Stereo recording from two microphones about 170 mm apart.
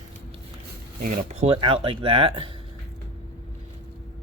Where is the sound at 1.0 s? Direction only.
55° right (ahead or behind).